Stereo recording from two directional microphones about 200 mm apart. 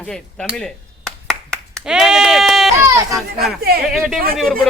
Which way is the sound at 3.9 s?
Centre (ahead or behind).